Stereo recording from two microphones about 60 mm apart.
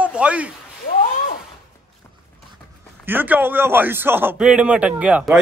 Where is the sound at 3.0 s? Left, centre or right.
Right.